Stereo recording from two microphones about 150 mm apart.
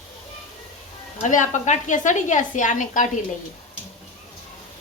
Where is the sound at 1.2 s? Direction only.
55° left (ahead or behind).